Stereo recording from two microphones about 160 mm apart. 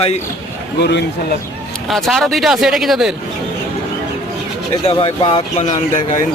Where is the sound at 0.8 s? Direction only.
90° left.